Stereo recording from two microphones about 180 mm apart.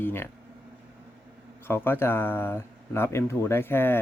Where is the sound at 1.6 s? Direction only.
10° left (ahead or behind).